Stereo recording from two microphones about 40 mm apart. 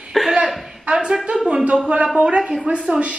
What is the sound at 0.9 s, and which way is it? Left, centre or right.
Speech, right.